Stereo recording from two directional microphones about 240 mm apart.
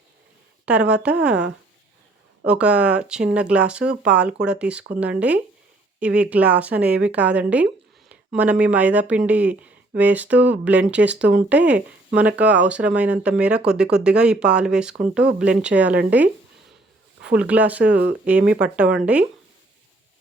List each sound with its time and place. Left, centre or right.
0.6 s speech: centre
17.3 s speech: centre